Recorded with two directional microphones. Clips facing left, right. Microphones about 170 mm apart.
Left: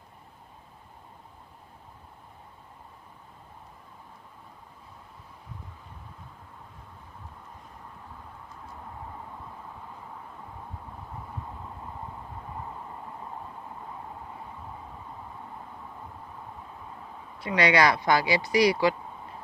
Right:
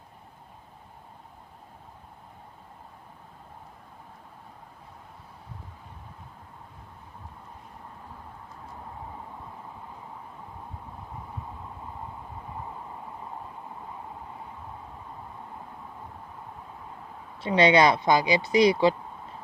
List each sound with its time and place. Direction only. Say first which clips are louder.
17.4 s speech: right 3 dB; 25° right (ahead or behind)